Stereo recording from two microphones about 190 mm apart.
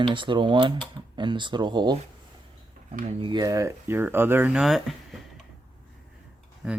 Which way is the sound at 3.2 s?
20° right (ahead or behind).